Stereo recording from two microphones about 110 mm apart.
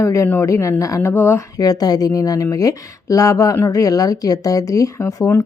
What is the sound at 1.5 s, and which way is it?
Speech, 35° left (ahead or behind).